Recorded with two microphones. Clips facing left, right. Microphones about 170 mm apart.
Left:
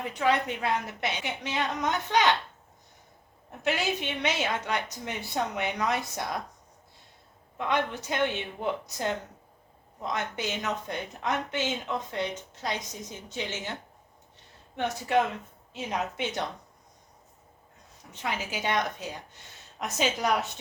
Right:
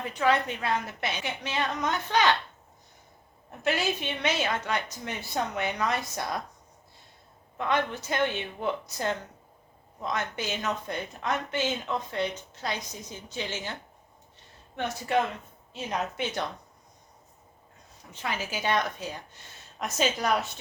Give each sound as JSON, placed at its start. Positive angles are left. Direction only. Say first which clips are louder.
{"t": 0.0, "sound": "a woman's voice", "louder": "right 1 dB", "side_deg": 15}
{"t": 3.6, "sound": "a woman's voice", "louder": "right 1 dB", "side_deg": 20}
{"t": 7.6, "sound": "a woman's voice", "louder": "right 1 dB", "side_deg": 15}
{"t": 14.8, "sound": "a woman's voice", "louder": "left 1 dB", "side_deg": 15}
{"t": 18.1, "sound": "a woman's voice", "louder": "even", "side_deg": 20}